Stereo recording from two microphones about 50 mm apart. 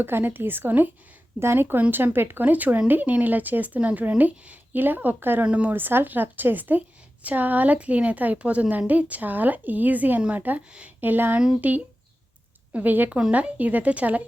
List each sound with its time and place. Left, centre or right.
0.0 s a woman's voice: right
1.4 s a woman's voice: right
2.4 s a woman's voice: right
5.5 s speech: right
5.7 s a woman's voice: right
10.7 s speech: right
11.0 s a woman's voice: right